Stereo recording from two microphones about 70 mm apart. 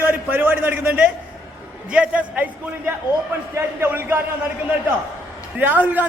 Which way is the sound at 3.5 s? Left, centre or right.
Right.